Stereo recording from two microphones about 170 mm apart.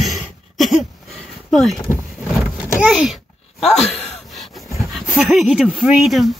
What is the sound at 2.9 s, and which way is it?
Speech, centre (ahead or behind).